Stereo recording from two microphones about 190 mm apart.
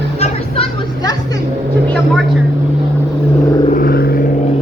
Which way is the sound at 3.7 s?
50° left (ahead or behind).